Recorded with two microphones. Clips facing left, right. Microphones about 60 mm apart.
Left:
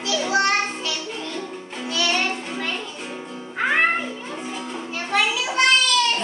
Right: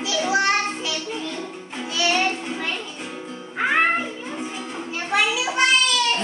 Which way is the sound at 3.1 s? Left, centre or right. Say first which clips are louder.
Left 1 dB; left.